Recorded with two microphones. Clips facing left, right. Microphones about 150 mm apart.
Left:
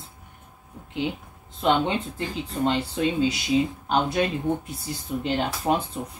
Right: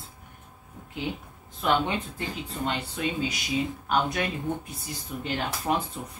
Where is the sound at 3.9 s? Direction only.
25° left (ahead or behind).